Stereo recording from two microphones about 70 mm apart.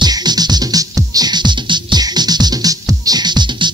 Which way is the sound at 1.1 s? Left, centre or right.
Right.